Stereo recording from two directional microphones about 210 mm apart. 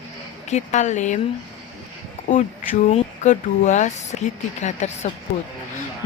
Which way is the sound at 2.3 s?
40° left (ahead or behind).